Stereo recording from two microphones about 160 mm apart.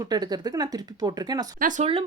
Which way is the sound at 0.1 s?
25° right (ahead or behind).